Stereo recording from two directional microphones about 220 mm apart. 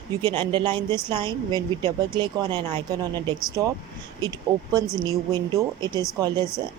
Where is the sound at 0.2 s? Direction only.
20° right (ahead or behind).